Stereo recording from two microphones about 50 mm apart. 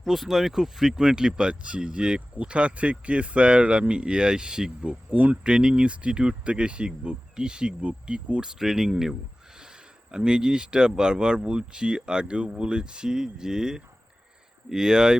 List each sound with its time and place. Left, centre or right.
0.0 s speech: centre; by 5.4 s right
5.4 s speech: centre